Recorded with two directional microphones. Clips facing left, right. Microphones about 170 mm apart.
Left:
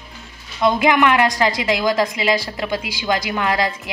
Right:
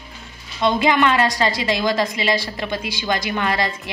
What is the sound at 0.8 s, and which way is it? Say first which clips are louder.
Speech: left 1 dB; 15° left (ahead or behind).